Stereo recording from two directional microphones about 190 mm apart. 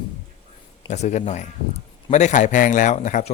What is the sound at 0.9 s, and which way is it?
A man's voice, 40° left (ahead or behind).